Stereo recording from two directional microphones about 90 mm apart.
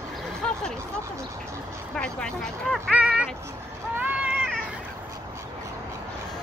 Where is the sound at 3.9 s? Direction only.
20° right (ahead or behind).